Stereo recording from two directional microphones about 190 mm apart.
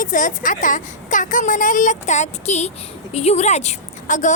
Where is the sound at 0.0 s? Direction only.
45° left (ahead or behind).